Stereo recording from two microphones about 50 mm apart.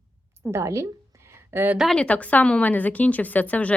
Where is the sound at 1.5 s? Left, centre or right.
Right.